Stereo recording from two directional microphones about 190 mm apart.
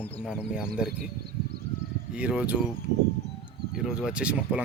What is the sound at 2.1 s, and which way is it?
Speech, 5° right (ahead or behind).